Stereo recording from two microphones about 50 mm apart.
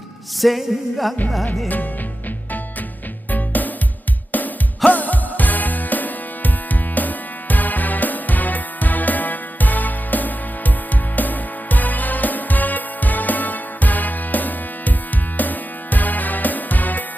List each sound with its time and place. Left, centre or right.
0.4 s a sound: centre
1.5 s music: left
3.2 s music: left